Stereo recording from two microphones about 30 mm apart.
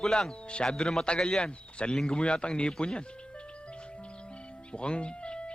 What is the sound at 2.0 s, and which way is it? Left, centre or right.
Speech, left.